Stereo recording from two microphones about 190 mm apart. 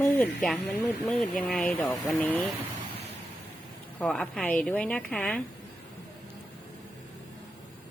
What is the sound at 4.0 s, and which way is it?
A woman's voice, 5° left (ahead or behind).